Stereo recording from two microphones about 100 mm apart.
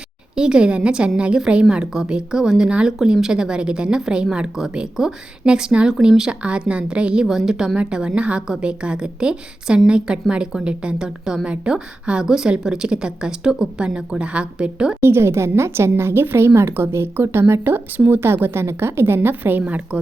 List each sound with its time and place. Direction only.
0.3 s a woman's voice: 10° right (ahead or behind)
15.0 s speech: 25° right (ahead or behind)